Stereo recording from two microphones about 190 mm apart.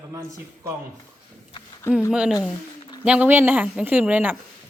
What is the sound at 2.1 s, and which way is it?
A woman's voice, 5° right (ahead or behind).